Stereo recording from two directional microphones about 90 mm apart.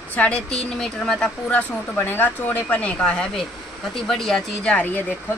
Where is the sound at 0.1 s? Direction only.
10° left (ahead or behind).